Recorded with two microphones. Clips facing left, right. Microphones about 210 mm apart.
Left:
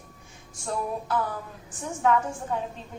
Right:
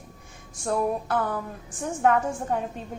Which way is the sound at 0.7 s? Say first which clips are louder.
Right 4 dB; 55° right (ahead or behind).